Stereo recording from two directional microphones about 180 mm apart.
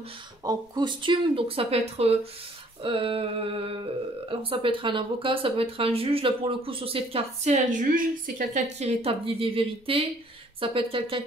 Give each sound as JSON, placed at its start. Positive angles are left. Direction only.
{"t": 0.4, "sound": "speech", "side_deg": -20}